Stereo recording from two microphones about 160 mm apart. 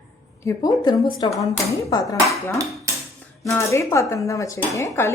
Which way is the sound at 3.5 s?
20° left (ahead or behind).